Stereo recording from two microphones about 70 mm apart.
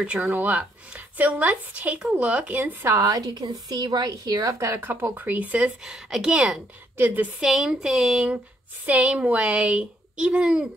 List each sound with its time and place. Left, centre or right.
0.0 s a child's voice: centre
2.6 s a woman's voice: right
3.0 s a woman's voice: right
4.7 s speech: right
5.9 s a child's voice: centre
7.0 s speech: right
7.3 s a child's voice: centre